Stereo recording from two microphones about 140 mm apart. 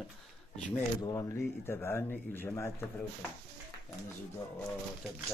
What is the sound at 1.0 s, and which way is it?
Speech, 25° left (ahead or behind).